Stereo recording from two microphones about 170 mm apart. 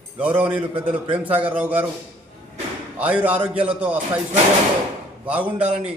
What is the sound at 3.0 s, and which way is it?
Speech, 10° right (ahead or behind).